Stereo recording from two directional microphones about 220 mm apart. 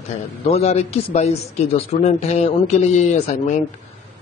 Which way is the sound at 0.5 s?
30° left (ahead or behind).